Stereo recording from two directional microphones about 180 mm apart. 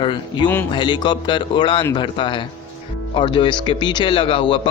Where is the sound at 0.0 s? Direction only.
25° left (ahead or behind).